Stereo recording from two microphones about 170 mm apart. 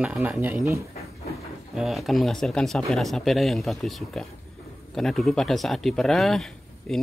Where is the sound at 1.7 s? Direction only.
Centre (ahead or behind).